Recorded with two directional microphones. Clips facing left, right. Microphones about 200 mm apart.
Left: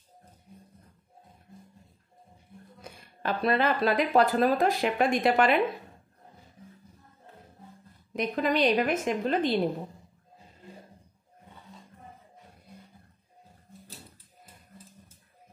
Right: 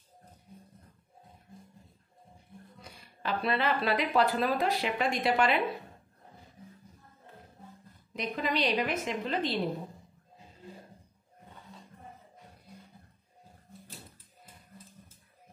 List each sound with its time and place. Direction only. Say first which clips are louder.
2.8 s speech: left 4 dB; 50° left (ahead or behind)
8.1 s speech: left 5 dB; 50° left (ahead or behind)